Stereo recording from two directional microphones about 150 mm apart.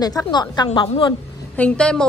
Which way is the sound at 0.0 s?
25° left (ahead or behind).